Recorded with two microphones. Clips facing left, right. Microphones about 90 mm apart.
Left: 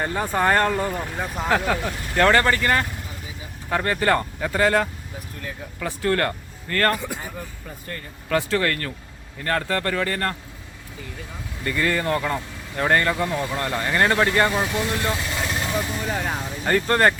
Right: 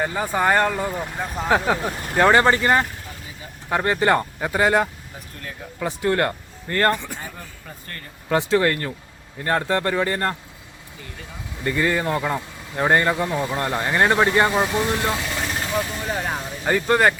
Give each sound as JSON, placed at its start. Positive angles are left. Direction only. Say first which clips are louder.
{"t": 0.0, "sound": "speech", "louder": "right 1 dB", "side_deg": -5}
{"t": 1.5, "sound": "speech", "louder": "right 2 dB", "side_deg": -15}
{"t": 6.9, "sound": "speech", "louder": "left 1 dB", "side_deg": 10}
{"t": 8.3, "sound": "speech", "louder": "right 3 dB", "side_deg": -20}
{"t": 11.6, "sound": "speech", "louder": "right 2 dB", "side_deg": -15}
{"t": 16.0, "sound": "speech", "louder": "even", "side_deg": -5}